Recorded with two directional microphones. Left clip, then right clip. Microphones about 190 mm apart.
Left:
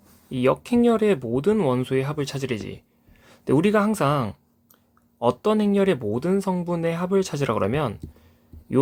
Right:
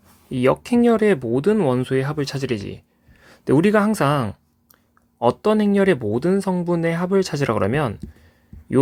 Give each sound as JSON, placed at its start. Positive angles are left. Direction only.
{"t": 0.3, "sound": "speech", "side_deg": -35}